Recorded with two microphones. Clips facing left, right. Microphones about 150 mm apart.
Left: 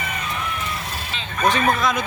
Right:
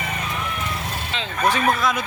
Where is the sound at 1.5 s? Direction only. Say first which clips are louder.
Left 1 dB; 5° right (ahead or behind).